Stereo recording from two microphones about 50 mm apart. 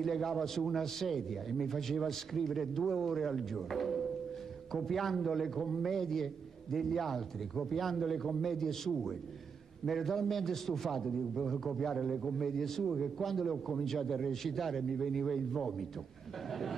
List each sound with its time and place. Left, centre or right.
0.0 s a man's voice: centre